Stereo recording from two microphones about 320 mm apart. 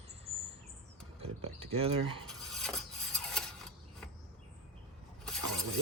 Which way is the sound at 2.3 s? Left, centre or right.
Centre.